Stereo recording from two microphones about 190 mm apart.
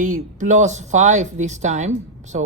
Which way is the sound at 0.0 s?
40° right (ahead or behind).